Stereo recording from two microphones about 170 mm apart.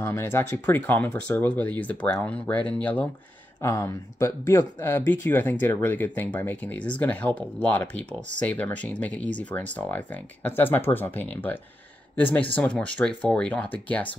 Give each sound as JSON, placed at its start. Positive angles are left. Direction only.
{"t": 0.0, "sound": "speech", "side_deg": 15}